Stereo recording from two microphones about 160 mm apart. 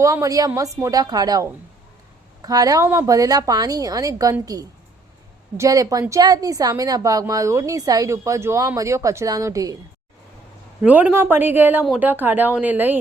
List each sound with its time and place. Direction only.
0.0 s a woman's voice: 20° right (ahead or behind)
10.8 s speech: 10° right (ahead or behind)